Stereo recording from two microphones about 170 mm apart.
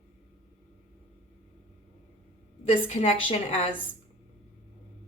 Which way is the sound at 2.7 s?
35° left (ahead or behind).